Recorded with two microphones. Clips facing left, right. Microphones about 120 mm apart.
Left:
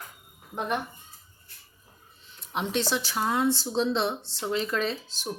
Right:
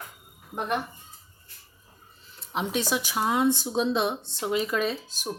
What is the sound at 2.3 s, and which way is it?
A woman's voice, centre (ahead or behind).